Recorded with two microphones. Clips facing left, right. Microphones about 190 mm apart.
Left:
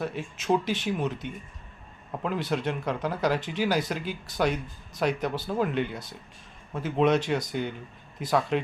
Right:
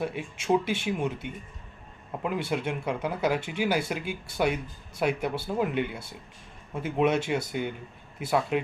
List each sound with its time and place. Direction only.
0.0 s speech: 10° right (ahead or behind)